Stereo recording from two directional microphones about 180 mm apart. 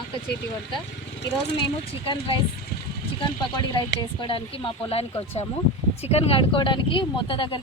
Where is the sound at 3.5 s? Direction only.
25° left (ahead or behind).